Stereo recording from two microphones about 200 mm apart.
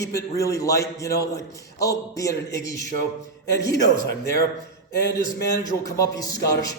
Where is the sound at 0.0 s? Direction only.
15° left (ahead or behind).